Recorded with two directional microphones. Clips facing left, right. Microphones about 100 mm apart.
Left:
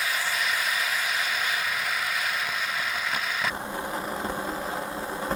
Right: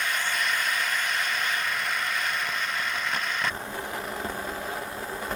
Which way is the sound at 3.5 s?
20° left (ahead or behind).